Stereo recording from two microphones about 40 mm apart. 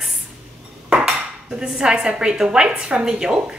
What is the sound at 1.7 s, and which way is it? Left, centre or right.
A woman's voice, right.